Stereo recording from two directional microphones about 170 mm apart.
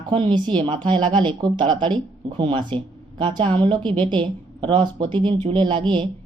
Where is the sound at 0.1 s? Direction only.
25° right (ahead or behind).